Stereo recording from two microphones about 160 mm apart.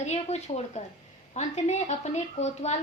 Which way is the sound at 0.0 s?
45° left (ahead or behind).